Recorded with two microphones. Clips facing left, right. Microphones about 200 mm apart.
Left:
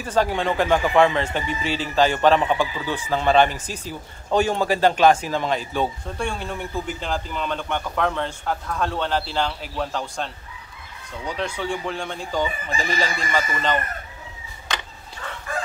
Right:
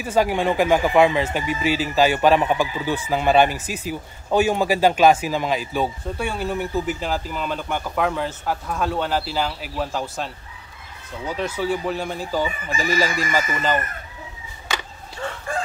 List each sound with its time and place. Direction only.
0.0 s speech: 10° right (ahead or behind)
14.7 s a sound: 10° right (ahead or behind)
15.5 s chicken: 30° right (ahead or behind)